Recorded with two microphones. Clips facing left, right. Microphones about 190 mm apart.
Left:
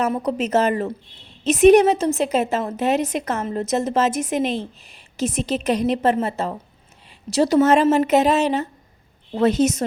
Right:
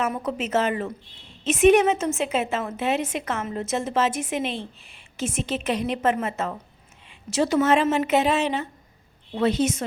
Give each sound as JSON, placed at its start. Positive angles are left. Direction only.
{"t": 0.0, "sound": "a woman's voice", "side_deg": 35}